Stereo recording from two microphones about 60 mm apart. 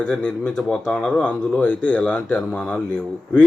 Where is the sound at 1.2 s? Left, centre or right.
Left.